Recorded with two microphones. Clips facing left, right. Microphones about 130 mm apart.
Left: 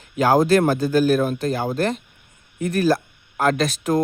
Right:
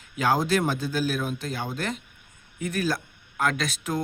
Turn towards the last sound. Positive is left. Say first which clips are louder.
# left 8 dB
turn(degrees=40)  # may be behind; listen again after turning